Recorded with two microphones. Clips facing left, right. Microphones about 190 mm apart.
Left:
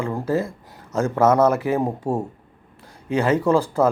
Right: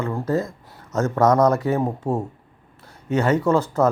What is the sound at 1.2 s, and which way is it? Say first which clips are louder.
Speech: even; 5° left (ahead or behind).